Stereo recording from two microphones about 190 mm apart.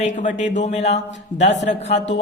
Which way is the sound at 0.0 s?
40° left (ahead or behind).